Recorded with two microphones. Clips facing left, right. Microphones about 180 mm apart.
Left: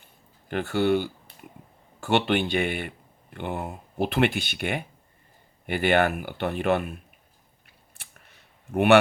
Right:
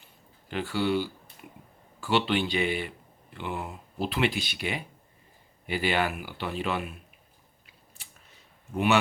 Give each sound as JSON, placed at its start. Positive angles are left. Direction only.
{"t": 0.0, "sound": "a sound", "side_deg": 55}
{"t": 2.0, "sound": "speech", "side_deg": 50}
{"t": 8.7, "sound": "speech", "side_deg": 60}